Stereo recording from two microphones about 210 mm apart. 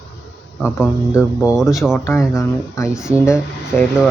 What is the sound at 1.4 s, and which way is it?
Speech, 5° right (ahead or behind).